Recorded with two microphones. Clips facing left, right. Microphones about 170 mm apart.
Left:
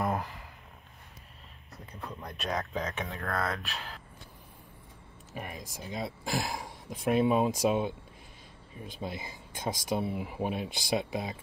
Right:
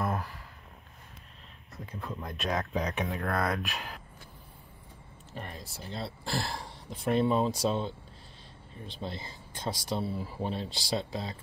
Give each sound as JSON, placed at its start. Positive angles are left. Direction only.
{"t": 0.0, "sound": "a sound", "side_deg": 15}
{"t": 1.9, "sound": "speech", "side_deg": 0}
{"t": 2.7, "sound": "speech", "side_deg": -10}
{"t": 5.3, "sound": "speech", "side_deg": 10}
{"t": 8.9, "sound": "speech", "side_deg": 10}